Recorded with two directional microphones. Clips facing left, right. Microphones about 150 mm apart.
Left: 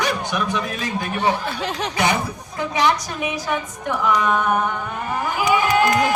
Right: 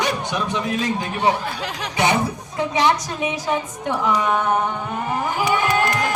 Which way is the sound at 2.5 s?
25° right (ahead or behind).